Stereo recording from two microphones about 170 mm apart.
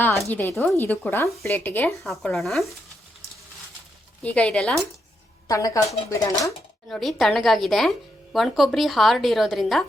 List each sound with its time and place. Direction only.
0.0 s speech: 15° left (ahead or behind)
2.0 s a woman's voice: centre (ahead or behind)
4.2 s speech: 5° left (ahead or behind)
5.5 s speech: 20° left (ahead or behind)
6.8 s a woman's voice: centre (ahead or behind)